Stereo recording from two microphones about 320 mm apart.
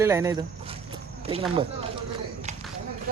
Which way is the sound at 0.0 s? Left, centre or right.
Centre.